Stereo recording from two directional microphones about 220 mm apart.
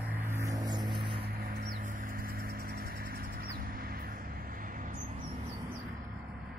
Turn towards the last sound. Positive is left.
turn(degrees=-35)  # may be behind; listen again after turning